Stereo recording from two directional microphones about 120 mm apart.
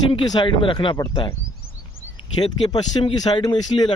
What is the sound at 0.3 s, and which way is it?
Speech, 40° left (ahead or behind).